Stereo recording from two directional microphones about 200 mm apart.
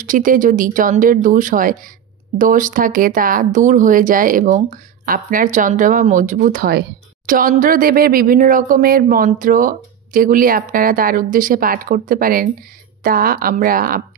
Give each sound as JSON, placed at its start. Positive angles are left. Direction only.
{"t": 0.0, "sound": "speech", "side_deg": -40}